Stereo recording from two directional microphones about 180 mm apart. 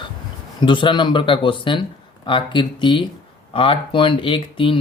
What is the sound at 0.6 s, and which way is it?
Speech, 25° left (ahead or behind).